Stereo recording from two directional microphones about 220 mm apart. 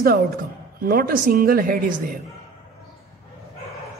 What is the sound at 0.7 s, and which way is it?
A man's voice, 40° right (ahead or behind).